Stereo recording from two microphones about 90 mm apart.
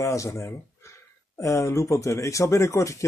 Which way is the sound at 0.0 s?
35° left (ahead or behind).